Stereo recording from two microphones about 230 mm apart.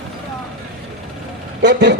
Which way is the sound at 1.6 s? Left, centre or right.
Right.